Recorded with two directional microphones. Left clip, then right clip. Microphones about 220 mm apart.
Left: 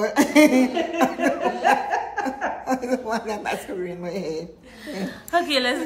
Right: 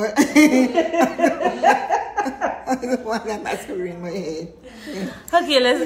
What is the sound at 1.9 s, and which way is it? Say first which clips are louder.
Laughter: right 3 dB; 25° right (ahead or behind).